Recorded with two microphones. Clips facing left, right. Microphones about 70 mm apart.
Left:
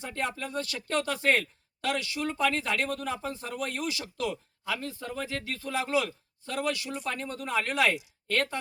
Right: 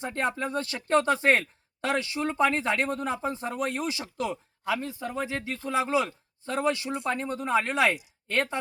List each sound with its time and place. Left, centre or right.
0.0 s speech: right